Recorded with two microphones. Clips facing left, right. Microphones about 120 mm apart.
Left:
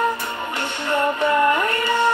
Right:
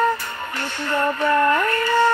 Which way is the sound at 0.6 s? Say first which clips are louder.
Left 1 dB; 20° left (ahead or behind).